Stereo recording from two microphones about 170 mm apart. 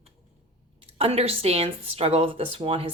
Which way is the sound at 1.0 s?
35° right (ahead or behind).